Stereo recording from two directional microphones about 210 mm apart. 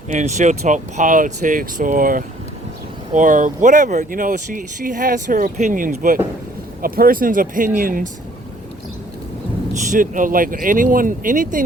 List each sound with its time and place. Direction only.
0.1 s speech: 35° right (ahead or behind)
9.9 s speech: 40° right (ahead or behind)